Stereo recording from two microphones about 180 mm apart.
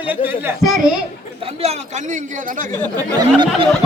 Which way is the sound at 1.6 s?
40° right (ahead or behind).